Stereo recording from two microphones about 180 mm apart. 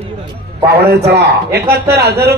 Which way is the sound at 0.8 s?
65° right (ahead or behind).